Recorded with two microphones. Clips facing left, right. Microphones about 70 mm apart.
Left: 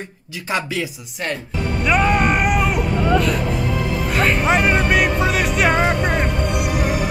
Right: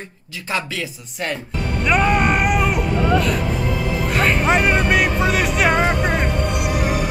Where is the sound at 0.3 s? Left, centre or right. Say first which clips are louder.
Left 2 dB; centre.